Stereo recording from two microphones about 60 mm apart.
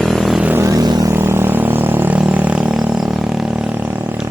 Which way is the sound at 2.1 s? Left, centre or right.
Right.